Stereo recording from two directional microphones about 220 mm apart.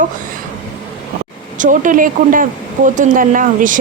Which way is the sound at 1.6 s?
35° right (ahead or behind).